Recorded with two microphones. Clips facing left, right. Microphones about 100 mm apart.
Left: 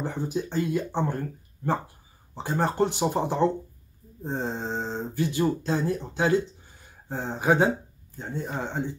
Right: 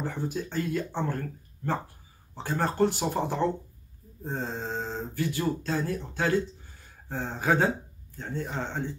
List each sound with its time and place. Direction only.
0.0 s speech: 20° left (ahead or behind)